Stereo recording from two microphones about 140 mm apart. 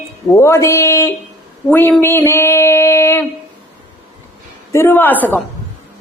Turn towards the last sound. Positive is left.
turn(degrees=10)  # may be behind; listen again after turning